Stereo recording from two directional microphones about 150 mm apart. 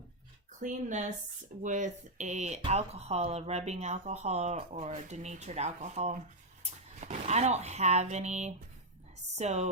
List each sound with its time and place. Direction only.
0.6 s a woman's voice: 55° right (ahead or behind)